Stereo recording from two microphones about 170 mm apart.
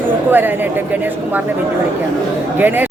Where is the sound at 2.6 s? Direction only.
10° right (ahead or behind).